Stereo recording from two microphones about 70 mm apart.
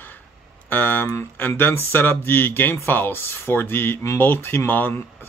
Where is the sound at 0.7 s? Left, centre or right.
Left.